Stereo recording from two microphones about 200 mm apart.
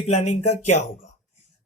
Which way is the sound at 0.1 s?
35° left (ahead or behind).